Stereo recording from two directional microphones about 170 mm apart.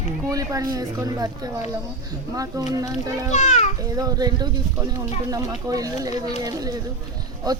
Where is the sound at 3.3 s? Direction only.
40° left (ahead or behind).